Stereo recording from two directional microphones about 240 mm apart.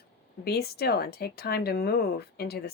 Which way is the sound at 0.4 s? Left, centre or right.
Left.